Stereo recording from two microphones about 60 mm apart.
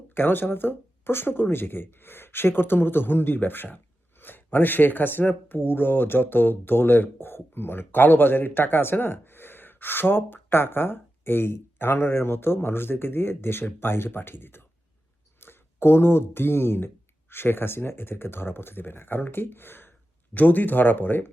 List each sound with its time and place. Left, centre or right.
0.1 s speech: left